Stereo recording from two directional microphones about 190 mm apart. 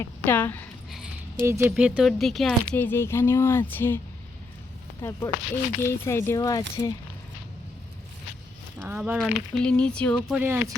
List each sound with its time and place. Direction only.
0.0 s speech: 10° left (ahead or behind)
0.9 s a sound: 5° right (ahead or behind)
1.5 s speech: 15° right (ahead or behind)
1.7 s speech: 5° right (ahead or behind); by 4.0 s 10° left (ahead or behind)
5.0 s speech: 10° left (ahead or behind)
8.8 s speech: 10° right (ahead or behind)